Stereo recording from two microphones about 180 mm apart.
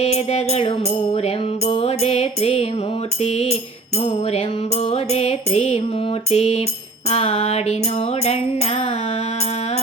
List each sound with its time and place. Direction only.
0.0 s music: 35° left (ahead or behind)